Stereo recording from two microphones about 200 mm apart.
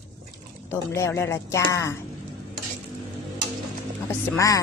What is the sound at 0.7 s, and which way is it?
Speech, 15° left (ahead or behind).